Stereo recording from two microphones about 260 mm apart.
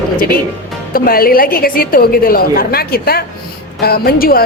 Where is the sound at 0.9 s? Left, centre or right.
Left.